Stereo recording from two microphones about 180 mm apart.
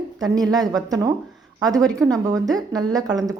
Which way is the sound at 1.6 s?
20° right (ahead or behind).